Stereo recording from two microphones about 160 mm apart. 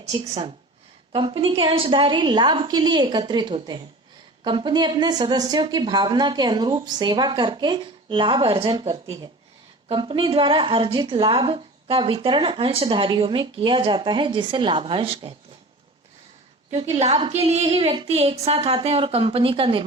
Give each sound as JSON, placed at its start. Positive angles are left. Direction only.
{"t": 1.1, "sound": "a woman's voice", "side_deg": -30}
{"t": 16.7, "sound": "a woman's voice", "side_deg": -40}